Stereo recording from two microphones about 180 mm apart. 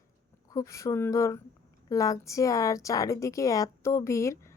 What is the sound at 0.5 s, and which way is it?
Speech, 15° left (ahead or behind).